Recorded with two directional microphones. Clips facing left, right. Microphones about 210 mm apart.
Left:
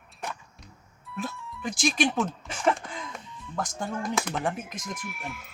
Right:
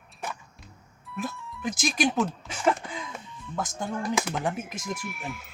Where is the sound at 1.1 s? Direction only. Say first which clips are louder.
Right 1 dB; centre (ahead or behind).